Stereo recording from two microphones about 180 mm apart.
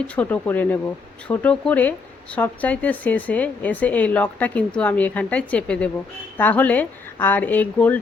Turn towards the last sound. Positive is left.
turn(degrees=10)  # may be behind; listen again after turning